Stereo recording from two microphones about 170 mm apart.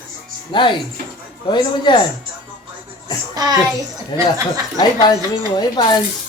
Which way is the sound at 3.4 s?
25° right (ahead or behind).